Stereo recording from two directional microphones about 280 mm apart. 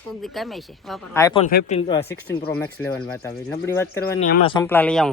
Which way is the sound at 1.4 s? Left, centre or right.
Left.